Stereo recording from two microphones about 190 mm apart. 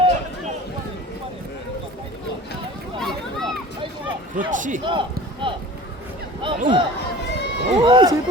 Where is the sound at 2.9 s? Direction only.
Centre (ahead or behind).